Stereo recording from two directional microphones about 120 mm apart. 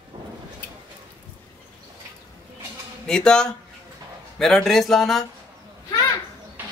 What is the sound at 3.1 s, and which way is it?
Speech, 5° left (ahead or behind).